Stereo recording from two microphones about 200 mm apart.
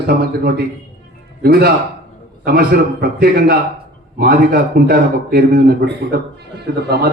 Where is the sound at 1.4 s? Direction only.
50° right (ahead or behind).